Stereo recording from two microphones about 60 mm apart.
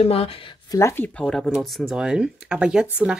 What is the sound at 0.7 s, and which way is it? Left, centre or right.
Speech, left.